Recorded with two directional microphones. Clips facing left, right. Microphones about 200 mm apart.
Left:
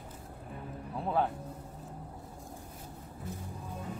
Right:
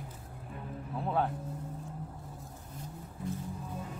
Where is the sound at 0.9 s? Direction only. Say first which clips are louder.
Left 1 dB; centre (ahead or behind).